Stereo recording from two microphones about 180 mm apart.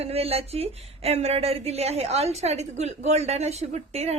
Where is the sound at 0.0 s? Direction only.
35° right (ahead or behind).